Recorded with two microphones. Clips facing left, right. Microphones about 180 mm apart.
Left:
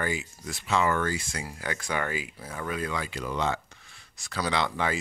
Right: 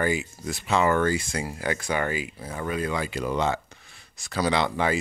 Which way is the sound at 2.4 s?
10° right (ahead or behind).